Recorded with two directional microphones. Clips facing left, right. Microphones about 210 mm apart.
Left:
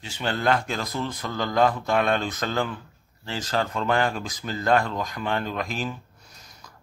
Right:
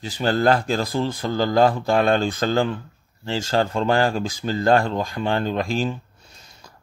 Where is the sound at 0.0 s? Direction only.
35° right (ahead or behind).